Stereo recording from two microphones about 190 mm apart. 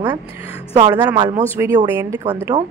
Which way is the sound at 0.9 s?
10° right (ahead or behind).